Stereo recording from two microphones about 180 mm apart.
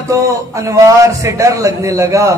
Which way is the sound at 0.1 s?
15° right (ahead or behind).